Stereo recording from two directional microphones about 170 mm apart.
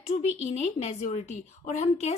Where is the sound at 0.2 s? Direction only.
40° left (ahead or behind).